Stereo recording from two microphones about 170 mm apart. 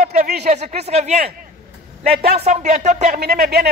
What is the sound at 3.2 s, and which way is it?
Speech, 65° right (ahead or behind).